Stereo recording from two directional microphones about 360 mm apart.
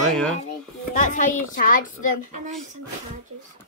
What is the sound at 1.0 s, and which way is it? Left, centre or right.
A child's voice, left.